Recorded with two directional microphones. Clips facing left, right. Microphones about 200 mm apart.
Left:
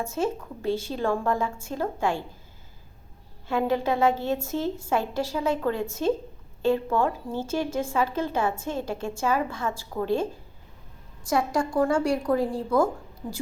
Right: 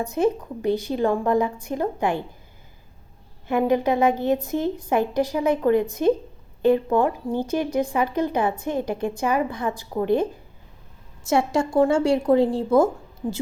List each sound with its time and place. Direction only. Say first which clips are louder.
0.0 s a woman's voice: right 6 dB; 15° right (ahead or behind)
3.4 s a woman's voice: right 4 dB; 15° right (ahead or behind)